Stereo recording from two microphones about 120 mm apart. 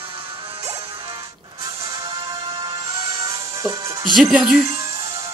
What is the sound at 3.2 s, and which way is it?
Music, 30° right (ahead or behind).